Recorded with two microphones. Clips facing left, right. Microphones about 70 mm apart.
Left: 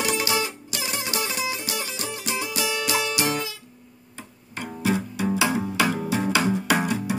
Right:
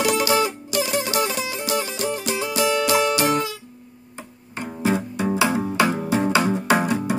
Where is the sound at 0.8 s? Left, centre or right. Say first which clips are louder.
Right 4 dB; left.